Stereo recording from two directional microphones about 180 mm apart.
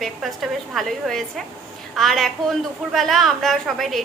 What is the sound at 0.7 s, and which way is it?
A woman's voice, centre (ahead or behind).